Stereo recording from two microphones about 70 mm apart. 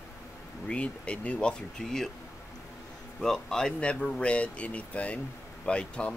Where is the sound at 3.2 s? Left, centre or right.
Centre.